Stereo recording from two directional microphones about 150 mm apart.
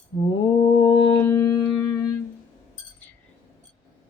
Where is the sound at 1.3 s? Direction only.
20° left (ahead or behind).